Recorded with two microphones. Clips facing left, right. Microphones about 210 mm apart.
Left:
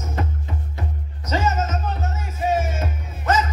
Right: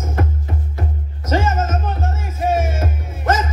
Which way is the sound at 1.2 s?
50° right (ahead or behind).